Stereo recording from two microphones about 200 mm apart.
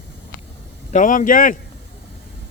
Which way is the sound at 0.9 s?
40° left (ahead or behind).